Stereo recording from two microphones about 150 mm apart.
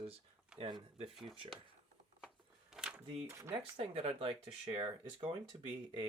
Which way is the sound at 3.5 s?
40° right (ahead or behind).